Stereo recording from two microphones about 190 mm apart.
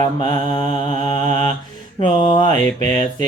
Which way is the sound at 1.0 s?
40° right (ahead or behind).